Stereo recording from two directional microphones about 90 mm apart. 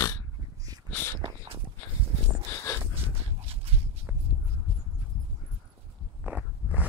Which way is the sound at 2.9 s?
90° right.